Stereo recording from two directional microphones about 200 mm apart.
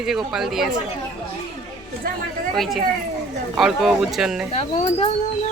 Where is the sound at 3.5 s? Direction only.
Centre (ahead or behind).